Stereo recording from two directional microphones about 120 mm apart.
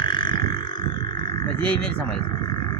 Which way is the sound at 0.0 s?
40° left (ahead or behind).